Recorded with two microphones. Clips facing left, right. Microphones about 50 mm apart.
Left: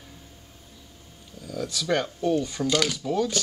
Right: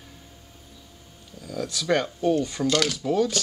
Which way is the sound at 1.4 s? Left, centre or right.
Centre.